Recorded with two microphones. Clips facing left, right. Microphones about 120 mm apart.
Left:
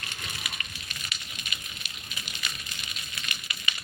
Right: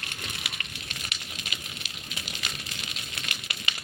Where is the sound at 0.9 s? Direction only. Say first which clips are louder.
Right 1 dB; 90° right.